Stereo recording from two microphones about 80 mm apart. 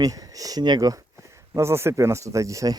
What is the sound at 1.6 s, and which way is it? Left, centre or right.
Speech, right.